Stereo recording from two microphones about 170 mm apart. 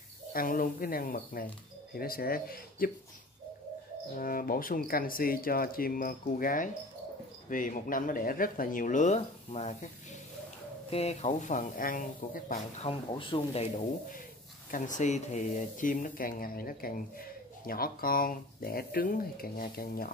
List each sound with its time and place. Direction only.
0.3 s speech: 55° left (ahead or behind)
4.1 s speech: 55° left (ahead or behind); by 9.8 s 40° left (ahead or behind)
10.9 s speech: 40° left (ahead or behind)
12.8 s speech: 30° left (ahead or behind)
14.7 s speech: 50° left (ahead or behind)